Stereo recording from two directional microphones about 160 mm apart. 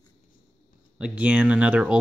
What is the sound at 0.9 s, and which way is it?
Speech, 5° right (ahead or behind).